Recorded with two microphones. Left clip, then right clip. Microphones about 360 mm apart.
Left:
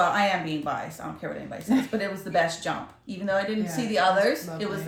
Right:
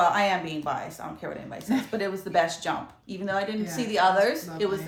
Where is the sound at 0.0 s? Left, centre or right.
Centre.